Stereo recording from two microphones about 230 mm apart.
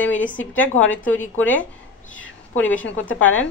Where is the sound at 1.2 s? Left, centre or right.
Centre.